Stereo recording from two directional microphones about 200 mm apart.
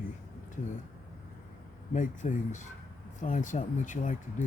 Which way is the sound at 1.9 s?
40° left (ahead or behind).